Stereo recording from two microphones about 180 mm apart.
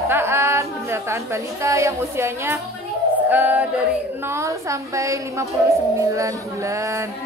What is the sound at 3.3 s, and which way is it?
Music, 10° right (ahead or behind).